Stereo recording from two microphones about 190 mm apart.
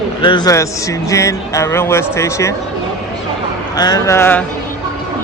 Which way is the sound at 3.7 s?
20° left (ahead or behind).